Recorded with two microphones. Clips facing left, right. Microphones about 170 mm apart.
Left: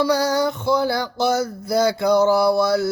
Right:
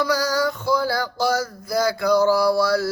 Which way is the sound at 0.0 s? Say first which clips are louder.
Left 3 dB; 25° left (ahead or behind).